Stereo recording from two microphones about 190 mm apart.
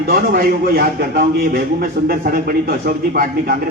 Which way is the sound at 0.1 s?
50° right (ahead or behind).